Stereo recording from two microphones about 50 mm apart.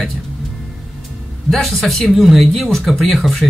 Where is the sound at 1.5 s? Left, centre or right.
Centre.